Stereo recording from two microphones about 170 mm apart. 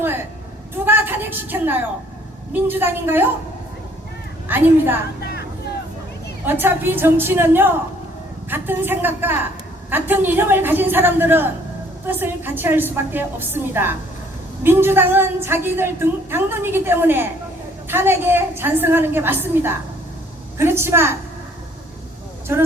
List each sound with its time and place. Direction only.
0.9 s a sound: 10° right (ahead or behind)
2.5 s a woman's voice: 10° right (ahead or behind)
4.4 s a woman's voice: 10° right (ahead or behind)
5.2 s vehicle: 65° left (ahead or behind)
6.4 s a woman's voice: 10° right (ahead or behind)